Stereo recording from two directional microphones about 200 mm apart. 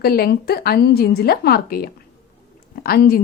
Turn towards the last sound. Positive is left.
turn(degrees=50)  # may be behind; listen again after turning